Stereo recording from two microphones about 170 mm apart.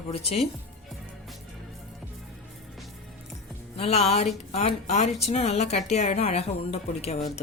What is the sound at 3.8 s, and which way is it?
A woman's voice, 35° left (ahead or behind).